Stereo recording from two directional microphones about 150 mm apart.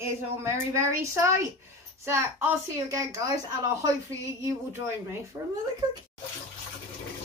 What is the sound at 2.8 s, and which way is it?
Speech, 20° right (ahead or behind).